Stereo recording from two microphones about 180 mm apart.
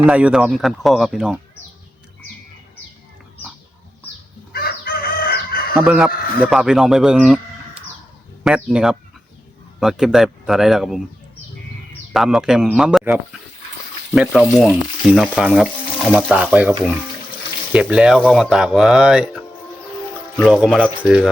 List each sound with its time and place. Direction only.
0.0 s speech: 5° right (ahead or behind)
4.5 s chicken: 55° left (ahead or behind)
5.7 s speech: 5° right (ahead or behind)
8.4 s speech: 5° right (ahead or behind)
12.1 s speech: centre (ahead or behind)
14.1 s speech: centre (ahead or behind)